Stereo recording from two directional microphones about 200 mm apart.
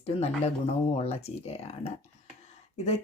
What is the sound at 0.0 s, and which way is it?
Speech, 30° left (ahead or behind).